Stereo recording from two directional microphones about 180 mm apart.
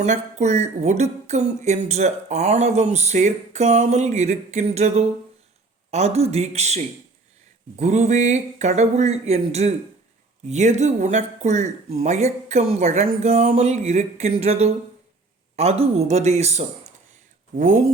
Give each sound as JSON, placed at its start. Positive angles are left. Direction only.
{"t": 0.0, "sound": "speech", "side_deg": -40}